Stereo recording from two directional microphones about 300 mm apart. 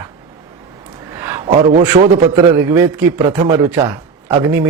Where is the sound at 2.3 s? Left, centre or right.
Centre.